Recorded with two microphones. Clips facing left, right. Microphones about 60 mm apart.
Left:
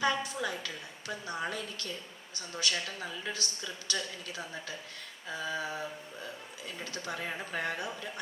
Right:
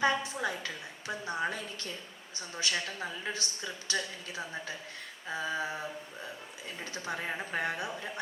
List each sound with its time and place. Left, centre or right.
0.0 s a woman's voice: right
6.9 s a woman's voice: right